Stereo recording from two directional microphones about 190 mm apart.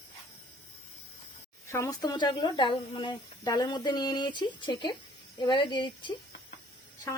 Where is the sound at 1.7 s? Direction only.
15° left (ahead or behind).